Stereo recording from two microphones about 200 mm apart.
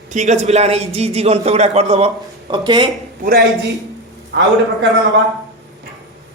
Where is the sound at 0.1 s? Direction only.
35° right (ahead or behind).